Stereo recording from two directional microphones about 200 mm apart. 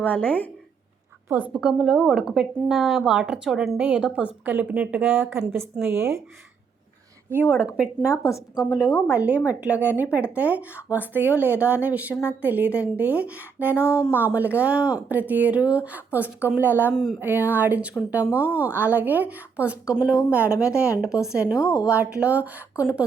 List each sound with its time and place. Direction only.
0.0 s a woman's voice: 5° left (ahead or behind)
1.3 s a woman's voice: 5° right (ahead or behind)
8.1 s a woman's voice: 15° left (ahead or behind)
9.0 s a woman's voice: 5° right (ahead or behind)
13.8 s a woman's voice: 15° left (ahead or behind)
14.1 s a woman's voice: 10° right (ahead or behind)
16.9 s a woman's voice: centre (ahead or behind)
17.2 s a woman's voice: 10° right (ahead or behind)
21.6 s a woman's voice: 15° left (ahead or behind)
21.8 s a woman's voice: 5° right (ahead or behind)